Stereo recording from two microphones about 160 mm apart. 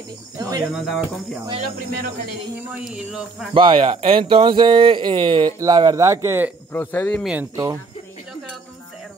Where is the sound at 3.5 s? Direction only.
30° right (ahead or behind); by 6.6 s 15° right (ahead or behind).